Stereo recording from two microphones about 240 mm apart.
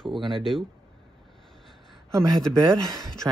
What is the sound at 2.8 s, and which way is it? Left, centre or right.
Speech, centre.